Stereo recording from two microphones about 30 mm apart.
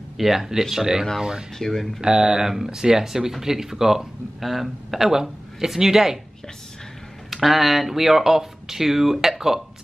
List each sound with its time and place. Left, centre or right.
0.2 s speech: centre
1.6 s speech: centre
2.0 s speech: right
4.4 s a man's voice: centre
7.4 s speech: centre